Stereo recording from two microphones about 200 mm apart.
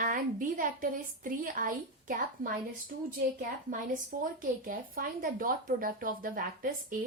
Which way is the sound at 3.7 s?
40° right (ahead or behind).